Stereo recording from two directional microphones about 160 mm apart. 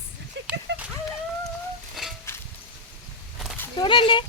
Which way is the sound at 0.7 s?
90° right.